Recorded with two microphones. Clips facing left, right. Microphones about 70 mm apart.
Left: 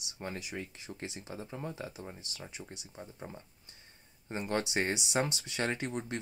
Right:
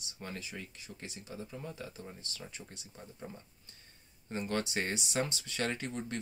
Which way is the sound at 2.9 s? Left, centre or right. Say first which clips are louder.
Left 1 dB; left.